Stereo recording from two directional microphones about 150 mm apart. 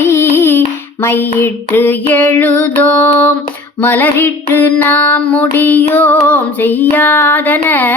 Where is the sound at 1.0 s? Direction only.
15° left (ahead or behind).